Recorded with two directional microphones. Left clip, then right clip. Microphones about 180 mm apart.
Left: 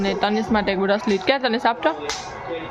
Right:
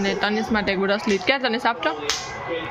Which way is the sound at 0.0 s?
15° left (ahead or behind).